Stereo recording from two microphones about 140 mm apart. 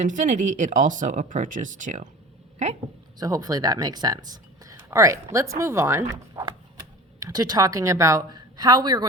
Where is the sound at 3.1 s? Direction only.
25° right (ahead or behind).